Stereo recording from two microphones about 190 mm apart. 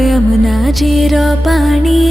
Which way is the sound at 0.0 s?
Centre (ahead or behind).